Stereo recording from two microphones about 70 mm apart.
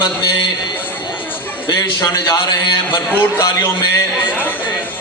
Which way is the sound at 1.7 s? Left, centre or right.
Left.